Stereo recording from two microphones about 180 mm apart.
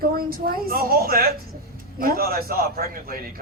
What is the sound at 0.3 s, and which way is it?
A woman's voice, 55° right (ahead or behind).